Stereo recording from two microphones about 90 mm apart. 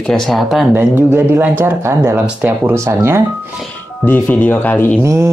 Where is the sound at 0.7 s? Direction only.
25° right (ahead or behind).